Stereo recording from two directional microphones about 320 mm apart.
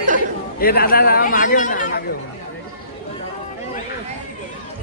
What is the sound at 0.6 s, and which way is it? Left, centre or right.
A man's voice, left.